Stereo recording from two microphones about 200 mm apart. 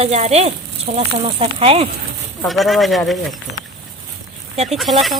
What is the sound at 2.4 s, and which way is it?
Speech, centre (ahead or behind).